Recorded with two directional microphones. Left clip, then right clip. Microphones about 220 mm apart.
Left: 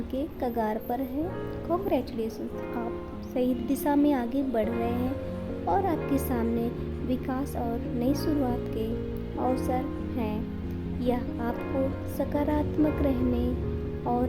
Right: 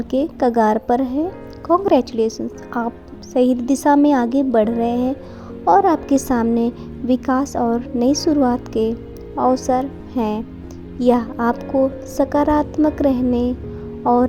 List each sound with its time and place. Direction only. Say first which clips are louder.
0.1 s a woman's voice: right 14 dB; 35° right (ahead or behind)